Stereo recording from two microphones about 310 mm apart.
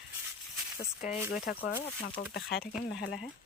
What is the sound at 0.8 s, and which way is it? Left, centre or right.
Speech, left.